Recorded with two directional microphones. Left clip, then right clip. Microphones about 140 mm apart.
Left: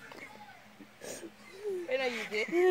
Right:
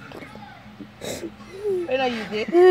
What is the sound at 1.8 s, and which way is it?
Speech, 25° left (ahead or behind).